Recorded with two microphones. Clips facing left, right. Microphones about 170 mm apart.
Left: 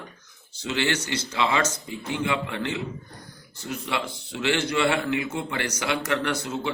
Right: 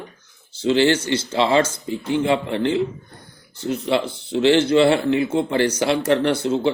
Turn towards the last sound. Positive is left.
turn(degrees=-30)  # may be behind; listen again after turning